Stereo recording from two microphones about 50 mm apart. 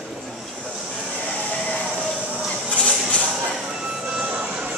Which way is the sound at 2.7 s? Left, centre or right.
Left.